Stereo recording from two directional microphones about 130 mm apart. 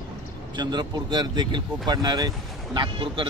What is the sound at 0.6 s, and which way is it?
Speech, 35° right (ahead or behind).